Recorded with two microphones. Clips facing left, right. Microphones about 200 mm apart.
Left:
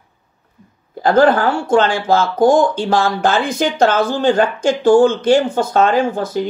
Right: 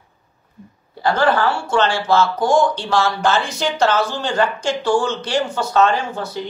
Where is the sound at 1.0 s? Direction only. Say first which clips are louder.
Left 5 dB; 50° left (ahead or behind).